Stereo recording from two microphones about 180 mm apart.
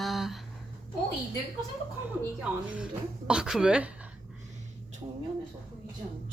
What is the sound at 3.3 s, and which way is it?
Speech, 5° right (ahead or behind).